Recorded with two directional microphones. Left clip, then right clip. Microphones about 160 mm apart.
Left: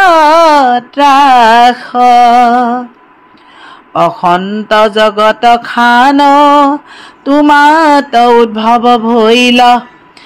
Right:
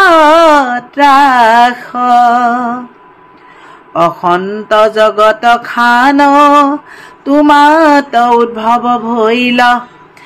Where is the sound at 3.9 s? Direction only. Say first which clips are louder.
Left 1 dB; 35° left (ahead or behind).